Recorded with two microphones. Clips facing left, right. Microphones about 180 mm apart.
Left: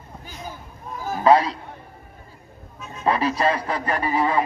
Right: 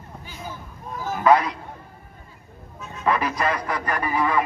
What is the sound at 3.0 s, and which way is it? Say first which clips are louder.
Speech: left 2 dB; 30° left (ahead or behind).